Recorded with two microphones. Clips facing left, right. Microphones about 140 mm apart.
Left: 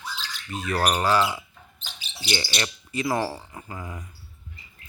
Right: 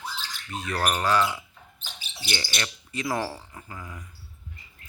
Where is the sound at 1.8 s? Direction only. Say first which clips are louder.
Left 1 dB; 50° right (ahead or behind).